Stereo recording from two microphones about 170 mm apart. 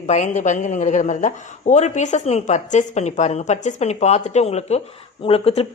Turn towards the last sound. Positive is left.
turn(degrees=35)  # may be behind; listen again after turning